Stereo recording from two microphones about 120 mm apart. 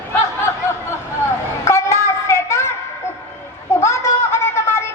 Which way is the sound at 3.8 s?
25° left (ahead or behind).